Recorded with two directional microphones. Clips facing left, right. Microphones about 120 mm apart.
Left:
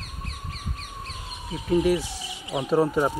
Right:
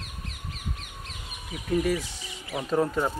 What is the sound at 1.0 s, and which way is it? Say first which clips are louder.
Bee: left 5 dB; 30° left (ahead or behind).